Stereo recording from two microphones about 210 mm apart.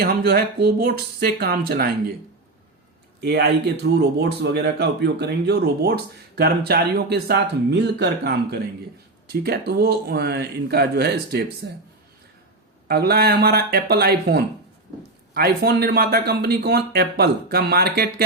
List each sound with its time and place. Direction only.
0.0 s speech: 45° right (ahead or behind)
3.9 s speech: 50° right (ahead or behind)
12.9 s speech: 50° right (ahead or behind)